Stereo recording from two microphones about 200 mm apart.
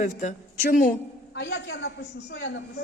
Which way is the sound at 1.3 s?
60° left (ahead or behind).